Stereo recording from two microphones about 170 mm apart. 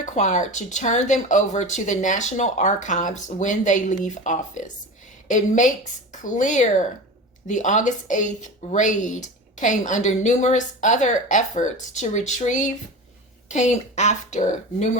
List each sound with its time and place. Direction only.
0.0 s speech: 45° left (ahead or behind)